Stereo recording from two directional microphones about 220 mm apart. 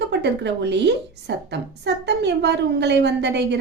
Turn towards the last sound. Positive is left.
turn(degrees=-50)  # may be behind; listen again after turning